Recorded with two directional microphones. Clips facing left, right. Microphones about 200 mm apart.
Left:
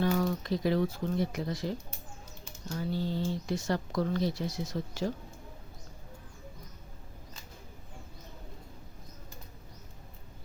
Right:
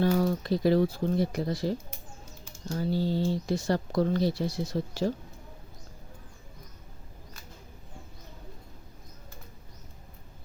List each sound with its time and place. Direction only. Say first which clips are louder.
0.0 s speech: right 4 dB; 35° right (ahead or behind)